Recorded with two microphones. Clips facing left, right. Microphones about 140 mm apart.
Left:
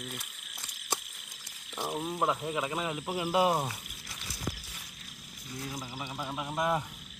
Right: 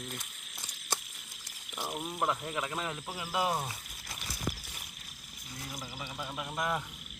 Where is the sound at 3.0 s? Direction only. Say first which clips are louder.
Left 7 dB; 25° left (ahead or behind).